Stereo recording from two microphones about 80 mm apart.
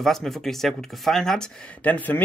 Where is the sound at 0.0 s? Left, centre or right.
Centre.